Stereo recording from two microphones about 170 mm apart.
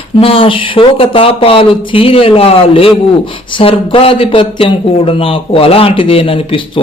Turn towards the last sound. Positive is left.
turn(degrees=30)  # may be behind; listen again after turning